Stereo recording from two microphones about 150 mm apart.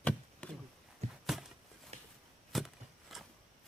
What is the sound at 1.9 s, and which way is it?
Chop, 45° right (ahead or behind).